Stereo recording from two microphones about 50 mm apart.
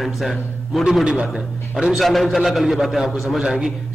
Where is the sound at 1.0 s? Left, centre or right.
Centre.